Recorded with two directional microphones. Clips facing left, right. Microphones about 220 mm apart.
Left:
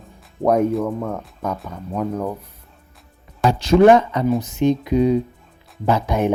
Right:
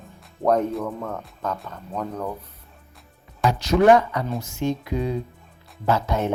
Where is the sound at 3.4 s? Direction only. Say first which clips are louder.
Left 4 dB; 30° left (ahead or behind).